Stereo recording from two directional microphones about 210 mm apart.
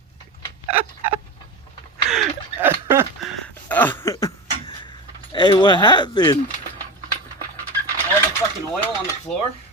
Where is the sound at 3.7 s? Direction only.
10° left (ahead or behind).